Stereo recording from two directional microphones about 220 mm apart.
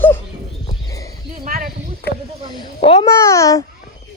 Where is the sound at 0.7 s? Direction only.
15° left (ahead or behind).